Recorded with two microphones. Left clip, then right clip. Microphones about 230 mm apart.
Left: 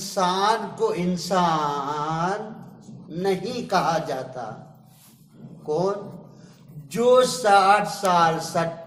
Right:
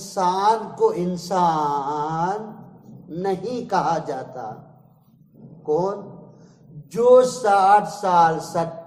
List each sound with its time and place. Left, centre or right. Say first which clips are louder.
0.1 s speech: right 2 dB; right
6.9 s a man's voice: right 3 dB; right